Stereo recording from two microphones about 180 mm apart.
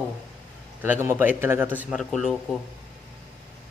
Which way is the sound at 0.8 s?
10° right (ahead or behind).